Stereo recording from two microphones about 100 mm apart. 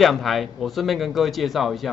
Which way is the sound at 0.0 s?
Centre (ahead or behind).